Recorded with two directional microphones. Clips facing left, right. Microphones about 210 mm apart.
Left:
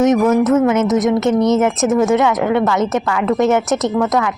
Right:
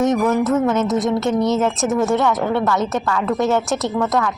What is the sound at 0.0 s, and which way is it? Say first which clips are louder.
A woman's voice: left 4 dB; 20° left (ahead or behind).